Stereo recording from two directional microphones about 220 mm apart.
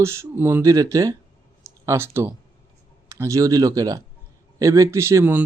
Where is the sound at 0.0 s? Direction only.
10° right (ahead or behind).